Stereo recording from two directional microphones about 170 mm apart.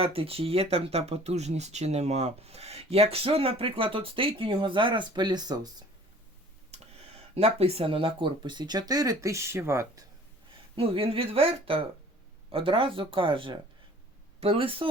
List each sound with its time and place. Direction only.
0.0 s speech: 35° right (ahead or behind)
6.7 s speech: 40° right (ahead or behind); by 10.0 s 15° right (ahead or behind)
10.8 s speech: 30° right (ahead or behind)